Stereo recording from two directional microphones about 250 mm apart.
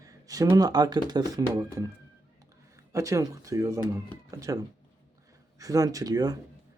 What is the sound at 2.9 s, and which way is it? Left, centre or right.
Speech, centre.